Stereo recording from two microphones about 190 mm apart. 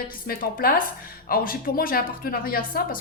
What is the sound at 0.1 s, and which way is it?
A woman's voice, 50° left (ahead or behind).